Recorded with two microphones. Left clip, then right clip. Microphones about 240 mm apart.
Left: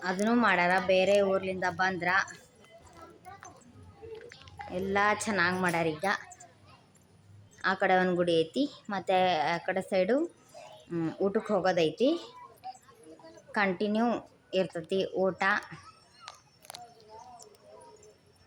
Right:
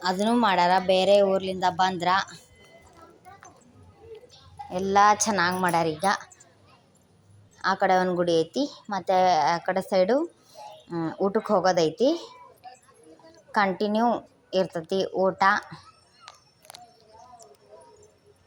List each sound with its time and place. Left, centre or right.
0.0 s a woman's voice: centre
2.6 s clip-clop: centre
4.0 s a sound: centre
4.7 s a woman's voice: centre
7.6 s a woman's voice: centre
15.6 s a sound: centre